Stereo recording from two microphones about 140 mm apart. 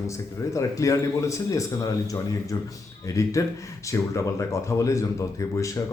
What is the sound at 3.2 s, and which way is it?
Speech, 20° left (ahead or behind).